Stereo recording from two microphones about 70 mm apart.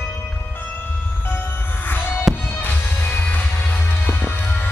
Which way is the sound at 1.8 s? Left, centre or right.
Left.